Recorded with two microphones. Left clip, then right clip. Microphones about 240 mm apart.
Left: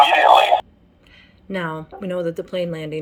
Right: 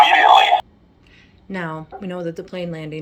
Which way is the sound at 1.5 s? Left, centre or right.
Centre.